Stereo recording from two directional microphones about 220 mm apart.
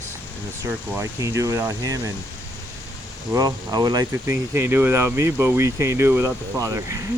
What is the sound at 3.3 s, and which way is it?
Speech, 15° right (ahead or behind).